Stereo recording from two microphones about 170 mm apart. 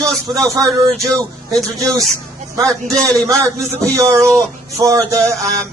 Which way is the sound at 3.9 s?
20° right (ahead or behind).